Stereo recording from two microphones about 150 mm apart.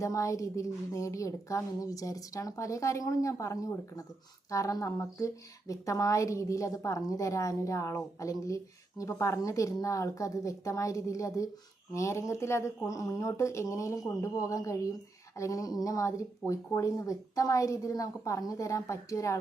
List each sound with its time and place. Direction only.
0.0 s a woman's voice: 20° left (ahead or behind)